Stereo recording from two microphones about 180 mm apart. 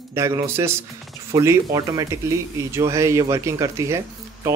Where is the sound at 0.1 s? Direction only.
15° right (ahead or behind).